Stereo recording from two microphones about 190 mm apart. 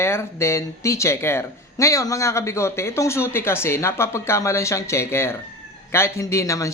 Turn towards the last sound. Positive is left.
turn(degrees=15)  # may be behind; listen again after turning